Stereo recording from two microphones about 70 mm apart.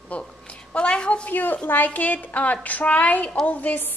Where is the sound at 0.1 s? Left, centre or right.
Left.